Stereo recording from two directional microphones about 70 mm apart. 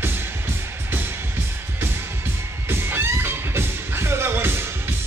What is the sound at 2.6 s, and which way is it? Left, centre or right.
Music, right.